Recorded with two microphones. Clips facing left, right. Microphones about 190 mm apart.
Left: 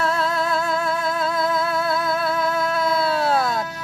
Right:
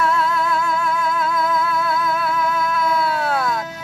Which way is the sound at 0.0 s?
35° left (ahead or behind).